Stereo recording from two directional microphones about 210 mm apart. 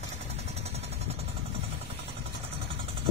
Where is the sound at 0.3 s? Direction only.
30° right (ahead or behind).